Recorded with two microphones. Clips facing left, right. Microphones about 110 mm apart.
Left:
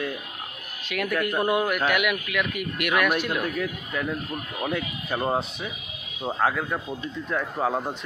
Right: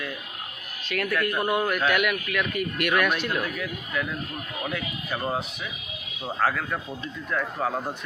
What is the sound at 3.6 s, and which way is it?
Speech, 30° left (ahead or behind).